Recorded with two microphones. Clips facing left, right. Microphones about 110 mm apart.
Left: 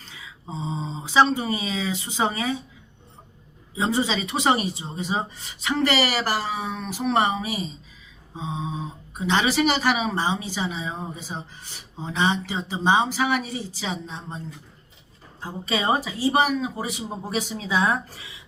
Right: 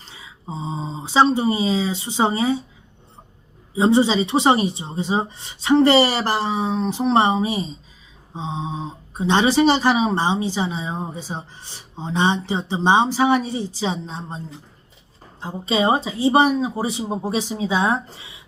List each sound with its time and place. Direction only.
0.0 s speech: 25° right (ahead or behind)
3.8 s speech: 25° right (ahead or behind)